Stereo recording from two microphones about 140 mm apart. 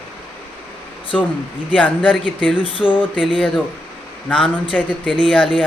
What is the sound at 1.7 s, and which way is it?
Speech, 10° left (ahead or behind).